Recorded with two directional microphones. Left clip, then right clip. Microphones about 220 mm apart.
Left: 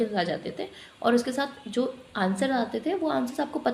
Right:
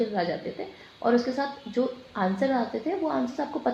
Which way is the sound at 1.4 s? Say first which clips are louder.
Right 1 dB; 25° left (ahead or behind).